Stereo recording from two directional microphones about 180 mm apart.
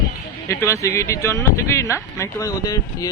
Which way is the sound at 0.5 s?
15° left (ahead or behind).